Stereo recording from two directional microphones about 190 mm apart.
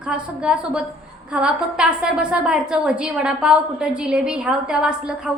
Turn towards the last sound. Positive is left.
turn(degrees=-5)  # may be behind; listen again after turning